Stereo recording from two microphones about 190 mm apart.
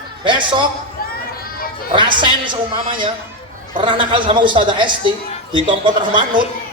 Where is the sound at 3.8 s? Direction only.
25° right (ahead or behind).